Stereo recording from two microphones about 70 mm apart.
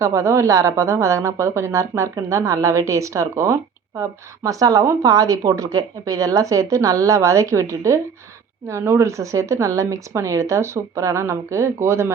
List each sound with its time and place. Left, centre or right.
0.0 s speech: right